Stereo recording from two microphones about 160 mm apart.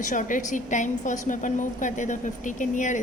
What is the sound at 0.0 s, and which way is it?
A woman's voice, 55° left (ahead or behind).